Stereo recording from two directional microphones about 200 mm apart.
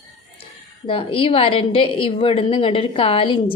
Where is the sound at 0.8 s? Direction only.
25° left (ahead or behind).